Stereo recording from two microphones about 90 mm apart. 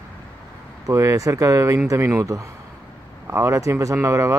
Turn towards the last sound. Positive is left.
turn(degrees=-35)  # may be behind; listen again after turning